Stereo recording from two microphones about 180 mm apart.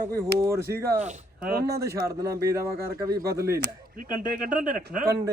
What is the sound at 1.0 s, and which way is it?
Speech, 55° right (ahead or behind).